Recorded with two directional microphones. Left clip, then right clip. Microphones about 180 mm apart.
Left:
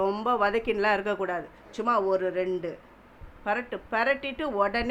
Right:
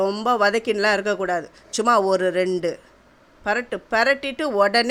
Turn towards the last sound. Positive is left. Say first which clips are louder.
# right 8 dB
turn(degrees=-45)  # may be behind; listen again after turning